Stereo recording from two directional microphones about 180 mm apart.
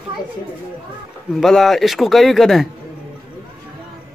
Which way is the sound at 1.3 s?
Centre (ahead or behind).